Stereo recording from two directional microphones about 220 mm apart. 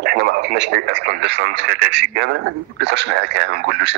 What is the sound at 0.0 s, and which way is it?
Speech, 50° right (ahead or behind).